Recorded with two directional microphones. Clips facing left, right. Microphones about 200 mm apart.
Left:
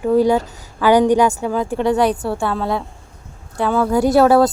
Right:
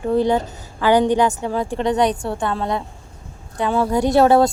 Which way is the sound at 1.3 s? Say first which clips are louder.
Left 2 dB; 30° right (ahead or behind).